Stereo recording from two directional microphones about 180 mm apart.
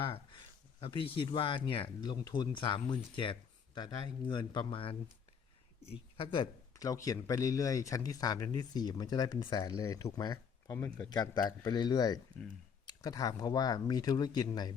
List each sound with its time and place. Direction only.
0.0 s a man's voice: 30° left (ahead or behind)